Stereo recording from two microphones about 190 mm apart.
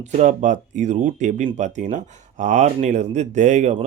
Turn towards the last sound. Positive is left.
turn(degrees=-35)  # may be behind; listen again after turning